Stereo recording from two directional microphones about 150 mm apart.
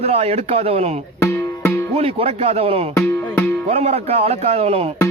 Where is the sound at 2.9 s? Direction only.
15° left (ahead or behind).